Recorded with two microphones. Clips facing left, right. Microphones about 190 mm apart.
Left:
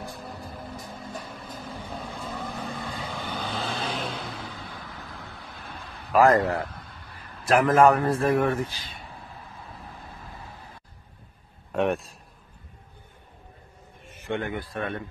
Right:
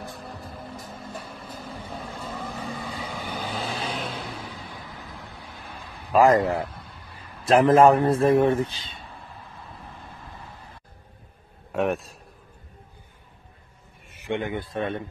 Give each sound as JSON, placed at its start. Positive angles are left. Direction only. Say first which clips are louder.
{"t": 0.0, "sound": "music", "louder": "even", "side_deg": 0}
{"t": 6.1, "sound": "speech", "louder": "right 1 dB", "side_deg": -15}
{"t": 6.6, "sound": "a sound", "louder": "right 2 dB", "side_deg": -5}
{"t": 7.4, "sound": "a man's voice", "louder": "right 3 dB", "side_deg": -25}
{"t": 11.7, "sound": "a man's voice", "louder": "even", "side_deg": 0}
{"t": 14.1, "sound": "a man's voice", "louder": "right 2 dB", "side_deg": -15}